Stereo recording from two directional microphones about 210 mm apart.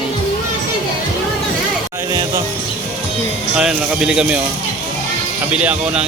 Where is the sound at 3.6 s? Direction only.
5° right (ahead or behind).